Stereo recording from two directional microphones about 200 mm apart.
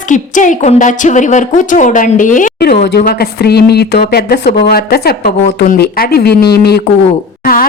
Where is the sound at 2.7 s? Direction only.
55° left (ahead or behind).